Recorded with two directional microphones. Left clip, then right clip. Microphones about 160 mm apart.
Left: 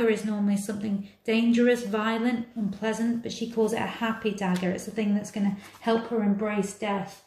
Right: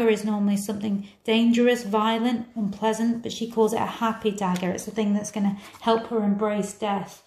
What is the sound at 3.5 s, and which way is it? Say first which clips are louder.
A woman's voice: right 4 dB; 40° right (ahead or behind).